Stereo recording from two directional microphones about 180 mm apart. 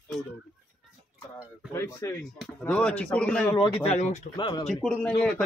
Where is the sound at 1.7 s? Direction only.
15° left (ahead or behind).